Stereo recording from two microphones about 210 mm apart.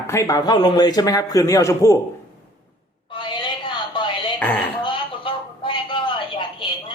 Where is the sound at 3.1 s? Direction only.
20° left (ahead or behind).